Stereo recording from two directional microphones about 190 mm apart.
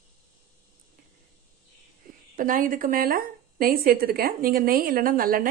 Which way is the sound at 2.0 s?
50° right (ahead or behind).